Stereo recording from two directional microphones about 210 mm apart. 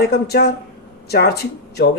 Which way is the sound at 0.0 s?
50° left (ahead or behind).